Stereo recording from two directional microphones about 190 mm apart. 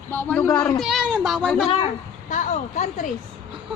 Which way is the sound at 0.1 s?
10° left (ahead or behind).